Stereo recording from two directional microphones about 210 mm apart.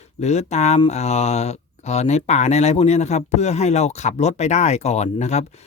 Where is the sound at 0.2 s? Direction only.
30° left (ahead or behind).